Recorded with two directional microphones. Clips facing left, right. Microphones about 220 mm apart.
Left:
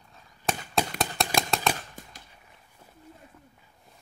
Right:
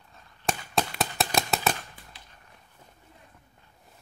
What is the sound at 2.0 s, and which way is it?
Cap gun, 45° left (ahead or behind).